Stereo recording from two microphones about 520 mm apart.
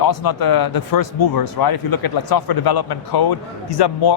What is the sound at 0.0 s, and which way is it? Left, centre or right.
Speech, left.